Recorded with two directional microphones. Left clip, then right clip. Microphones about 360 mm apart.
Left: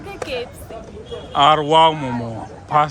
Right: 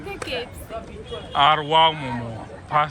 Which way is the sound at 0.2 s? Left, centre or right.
Left.